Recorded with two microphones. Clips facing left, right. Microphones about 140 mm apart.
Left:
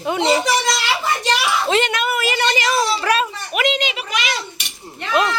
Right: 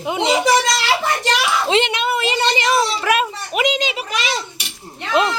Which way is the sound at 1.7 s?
25° right (ahead or behind).